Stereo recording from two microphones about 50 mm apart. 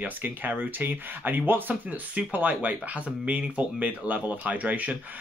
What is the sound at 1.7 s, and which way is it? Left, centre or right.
Speech, right.